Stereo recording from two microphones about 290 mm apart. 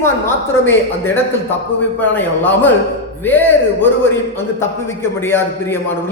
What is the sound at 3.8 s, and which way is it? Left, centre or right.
Speech, centre.